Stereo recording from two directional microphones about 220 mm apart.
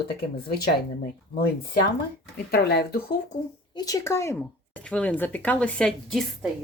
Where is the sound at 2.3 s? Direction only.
45° left (ahead or behind).